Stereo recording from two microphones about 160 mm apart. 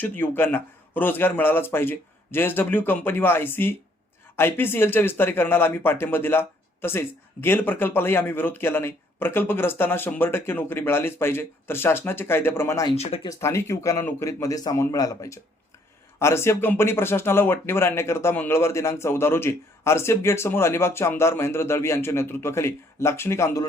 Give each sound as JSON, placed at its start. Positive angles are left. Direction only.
{"t": 0.0, "sound": "speech", "side_deg": 10}
{"t": 13.0, "sound": "speech", "side_deg": 40}
{"t": 13.2, "sound": "a man's voice", "side_deg": 20}